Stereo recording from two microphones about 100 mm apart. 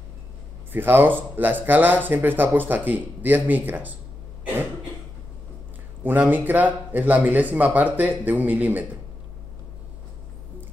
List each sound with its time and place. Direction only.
0.7 s speech: 20° right (ahead or behind)
6.0 s speech: 20° right (ahead or behind)